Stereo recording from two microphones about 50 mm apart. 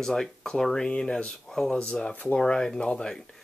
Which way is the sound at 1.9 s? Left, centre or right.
Centre.